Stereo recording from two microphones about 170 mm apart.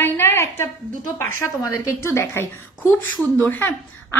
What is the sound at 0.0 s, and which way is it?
A woman's voice, 15° left (ahead or behind).